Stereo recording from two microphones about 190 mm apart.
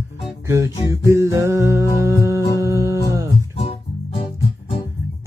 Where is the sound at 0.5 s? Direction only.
15° right (ahead or behind).